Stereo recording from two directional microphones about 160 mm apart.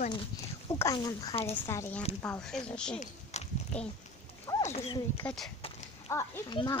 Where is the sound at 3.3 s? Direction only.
45° left (ahead or behind).